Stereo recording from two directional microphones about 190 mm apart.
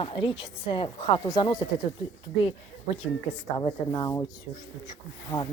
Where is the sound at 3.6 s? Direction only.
20° left (ahead or behind).